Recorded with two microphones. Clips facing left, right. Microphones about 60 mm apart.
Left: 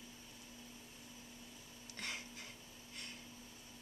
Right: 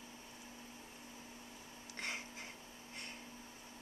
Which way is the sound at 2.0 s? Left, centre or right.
Right.